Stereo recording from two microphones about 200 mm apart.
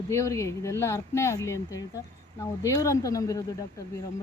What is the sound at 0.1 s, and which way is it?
Speech, 15° left (ahead or behind).